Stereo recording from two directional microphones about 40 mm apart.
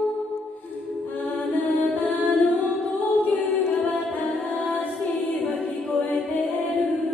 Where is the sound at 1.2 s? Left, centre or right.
Left.